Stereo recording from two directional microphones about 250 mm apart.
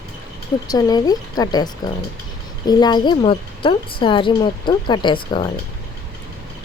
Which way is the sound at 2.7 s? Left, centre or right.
Centre.